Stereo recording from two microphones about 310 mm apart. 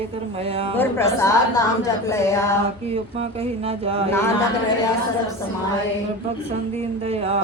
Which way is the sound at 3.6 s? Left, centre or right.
Centre.